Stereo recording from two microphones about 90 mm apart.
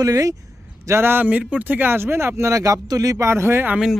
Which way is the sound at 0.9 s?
25° right (ahead or behind).